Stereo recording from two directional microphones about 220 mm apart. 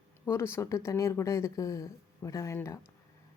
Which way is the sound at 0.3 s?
10° left (ahead or behind).